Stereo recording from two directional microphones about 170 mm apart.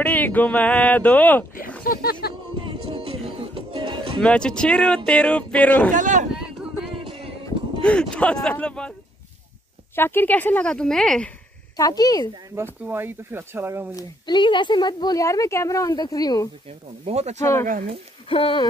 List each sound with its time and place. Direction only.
0.0 s speech: 10° left (ahead or behind)
1.9 s speech: 65° left (ahead or behind)
2.6 s music: 30° right (ahead or behind)
4.2 s speech: 5° left (ahead or behind)
5.9 s speech: 45° right (ahead or behind)
7.1 s music: 35° right (ahead or behind)
7.8 s speech: 5° left (ahead or behind)
9.9 s speech: 10° left (ahead or behind)
11.7 s speech: 20° left (ahead or behind)
12.8 s speech: 15° right (ahead or behind)
13.9 s speech: 25° left (ahead or behind)
17.0 s speech: 40° right (ahead or behind)
18.3 s speech: 30° left (ahead or behind)